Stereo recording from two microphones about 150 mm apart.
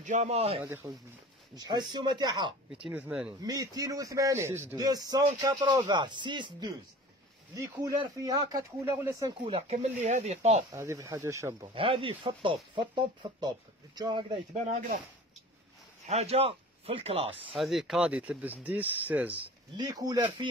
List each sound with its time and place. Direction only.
0.0 s speech: 55° right (ahead or behind)
0.6 s a man's voice: 20° right (ahead or behind)
2.9 s speech: 5° right (ahead or behind)
3.4 s a man's voice: 25° right (ahead or behind)
9.4 s speech: 40° right (ahead or behind)
10.7 s a man's voice: 20° right (ahead or behind)
11.6 s speech: 35° right (ahead or behind)
14.5 s speech: 55° right (ahead or behind)
16.1 s speech: 45° right (ahead or behind)
17.5 s speech: centre (ahead or behind)
19.8 s a man's voice: 25° right (ahead or behind)